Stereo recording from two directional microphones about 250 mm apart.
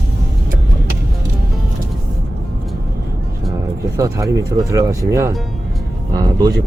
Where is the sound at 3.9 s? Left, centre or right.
Centre.